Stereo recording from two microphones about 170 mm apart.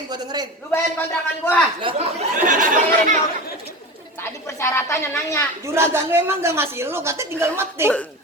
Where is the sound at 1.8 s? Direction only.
30° right (ahead or behind).